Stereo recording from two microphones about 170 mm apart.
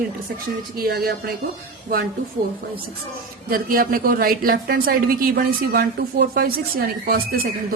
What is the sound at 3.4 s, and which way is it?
A woman's voice, 60° right (ahead or behind).